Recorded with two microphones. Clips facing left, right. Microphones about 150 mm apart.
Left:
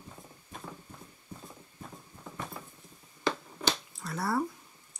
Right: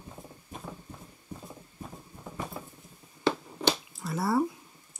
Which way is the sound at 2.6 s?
20° right (ahead or behind).